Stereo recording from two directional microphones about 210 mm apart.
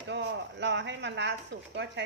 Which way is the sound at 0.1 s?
55° right (ahead or behind).